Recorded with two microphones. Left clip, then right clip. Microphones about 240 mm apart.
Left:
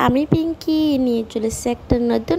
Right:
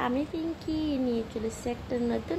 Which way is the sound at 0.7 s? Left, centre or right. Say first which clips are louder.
Left 12 dB; left.